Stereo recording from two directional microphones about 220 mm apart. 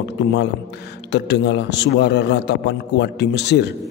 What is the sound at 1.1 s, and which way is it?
A man's voice, 50° left (ahead or behind).